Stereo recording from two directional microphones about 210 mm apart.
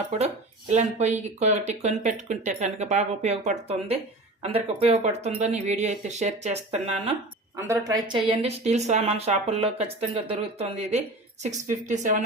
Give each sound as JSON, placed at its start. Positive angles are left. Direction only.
{"t": 0.7, "sound": "speech", "side_deg": -35}
{"t": 7.5, "sound": "speech", "side_deg": -15}